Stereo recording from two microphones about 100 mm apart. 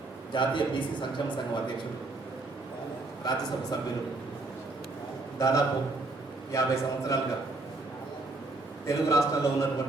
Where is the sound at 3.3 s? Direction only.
45° left (ahead or behind).